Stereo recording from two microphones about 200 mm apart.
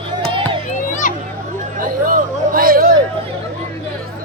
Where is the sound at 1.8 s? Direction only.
45° right (ahead or behind).